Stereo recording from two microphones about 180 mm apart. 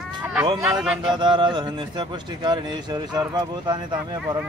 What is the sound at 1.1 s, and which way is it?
A man's voice, 25° right (ahead or behind).